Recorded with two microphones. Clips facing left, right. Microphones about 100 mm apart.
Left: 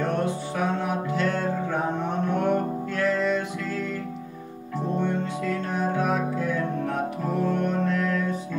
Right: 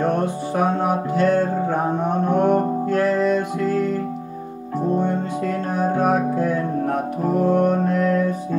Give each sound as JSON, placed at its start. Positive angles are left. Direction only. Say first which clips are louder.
{"t": 0.0, "sound": "music", "louder": "right 5 dB", "side_deg": -50}